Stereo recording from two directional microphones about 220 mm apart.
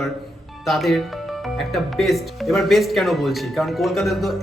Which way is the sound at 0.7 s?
Centre (ahead or behind).